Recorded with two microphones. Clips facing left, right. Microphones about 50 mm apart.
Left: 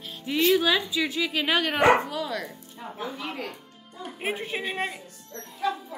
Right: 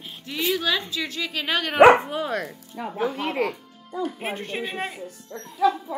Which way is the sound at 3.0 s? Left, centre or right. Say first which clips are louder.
Right 9 dB; right.